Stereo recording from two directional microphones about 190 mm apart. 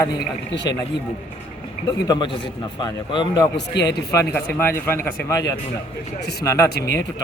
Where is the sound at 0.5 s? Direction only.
65° left (ahead or behind).